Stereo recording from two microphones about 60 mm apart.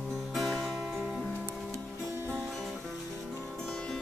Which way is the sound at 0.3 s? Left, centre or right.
Centre.